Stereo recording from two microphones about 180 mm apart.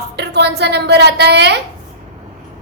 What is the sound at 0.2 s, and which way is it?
Speech, 70° right (ahead or behind).